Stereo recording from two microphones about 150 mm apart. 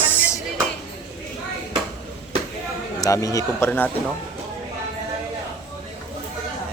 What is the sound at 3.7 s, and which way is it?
Speech, 10° left (ahead or behind).